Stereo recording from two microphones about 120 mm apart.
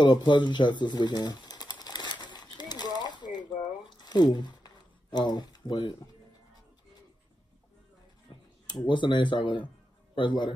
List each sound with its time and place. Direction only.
0.0 s pigeon: 40° left (ahead or behind)
8.3 s a sound: 40° left (ahead or behind)
8.6 s speech: 40° left (ahead or behind)